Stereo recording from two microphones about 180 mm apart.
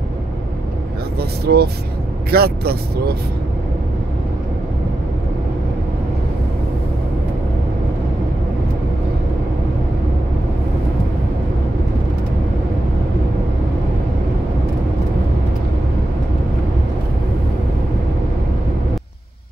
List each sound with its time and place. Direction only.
1.4 s speech: 60° right (ahead or behind)